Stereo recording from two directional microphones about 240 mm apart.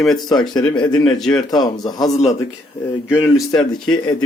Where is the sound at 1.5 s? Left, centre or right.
Centre.